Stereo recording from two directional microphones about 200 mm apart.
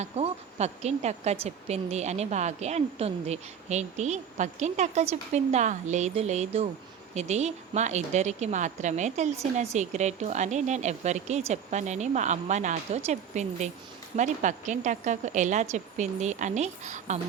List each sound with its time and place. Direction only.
0.0 s speech: 35° right (ahead or behind)